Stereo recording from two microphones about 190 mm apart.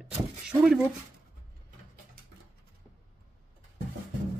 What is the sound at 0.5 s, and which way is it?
Speech, 5° right (ahead or behind).